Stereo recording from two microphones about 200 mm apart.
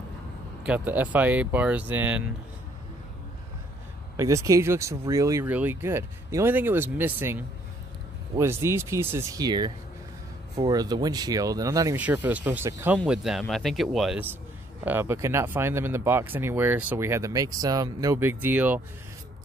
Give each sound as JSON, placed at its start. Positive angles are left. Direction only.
{"t": 0.7, "sound": "speech", "side_deg": -10}
{"t": 4.2, "sound": "speech", "side_deg": -15}